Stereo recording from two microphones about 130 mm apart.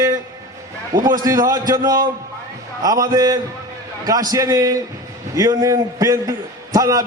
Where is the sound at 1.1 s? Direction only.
30° right (ahead or behind).